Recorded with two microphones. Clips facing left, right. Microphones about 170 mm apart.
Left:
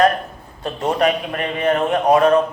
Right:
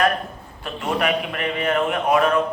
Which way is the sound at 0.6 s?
40° left (ahead or behind).